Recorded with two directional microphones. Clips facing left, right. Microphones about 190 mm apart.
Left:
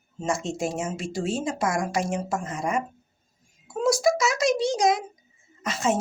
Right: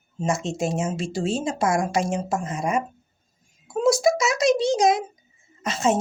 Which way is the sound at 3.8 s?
25° right (ahead or behind).